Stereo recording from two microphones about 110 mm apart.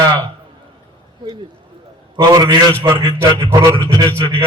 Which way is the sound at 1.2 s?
45° right (ahead or behind).